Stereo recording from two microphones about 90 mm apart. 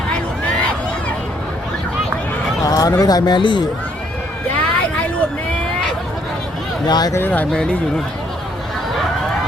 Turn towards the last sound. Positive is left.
turn(degrees=10)  # may be behind; listen again after turning